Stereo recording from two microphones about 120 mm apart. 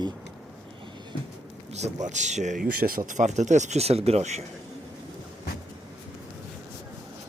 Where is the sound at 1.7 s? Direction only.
70° right (ahead or behind).